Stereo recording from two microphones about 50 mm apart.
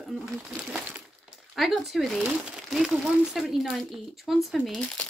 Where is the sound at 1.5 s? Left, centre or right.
Centre.